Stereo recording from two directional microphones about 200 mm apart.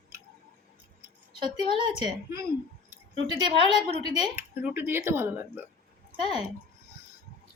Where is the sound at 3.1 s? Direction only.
20° right (ahead or behind).